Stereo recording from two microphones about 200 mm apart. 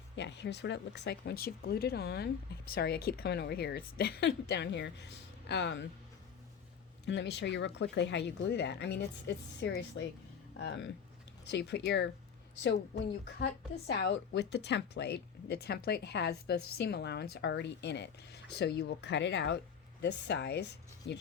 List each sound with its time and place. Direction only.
0.2 s a woman's voice: 60° left (ahead or behind)
7.0 s a woman's voice: 60° left (ahead or behind)
11.4 s a woman's voice: 60° left (ahead or behind)